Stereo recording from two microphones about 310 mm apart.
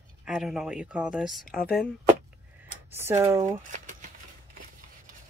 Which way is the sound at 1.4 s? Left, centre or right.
Left.